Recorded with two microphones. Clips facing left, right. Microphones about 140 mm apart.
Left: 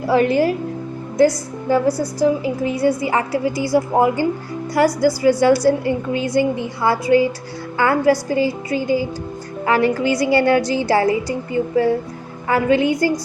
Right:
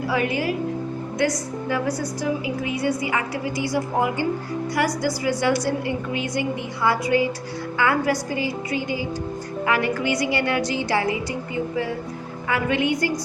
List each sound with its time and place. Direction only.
1.2 s a woman's voice: 35° left (ahead or behind)